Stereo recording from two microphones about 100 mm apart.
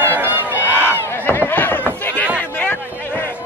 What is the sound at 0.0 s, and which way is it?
Crowd, 20° right (ahead or behind).